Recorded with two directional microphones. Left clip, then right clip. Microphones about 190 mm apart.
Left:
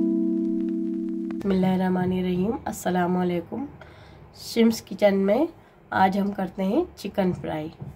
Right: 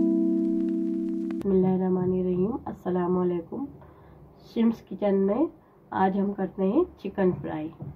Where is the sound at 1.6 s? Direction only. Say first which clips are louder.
Left 2 dB; 35° left (ahead or behind).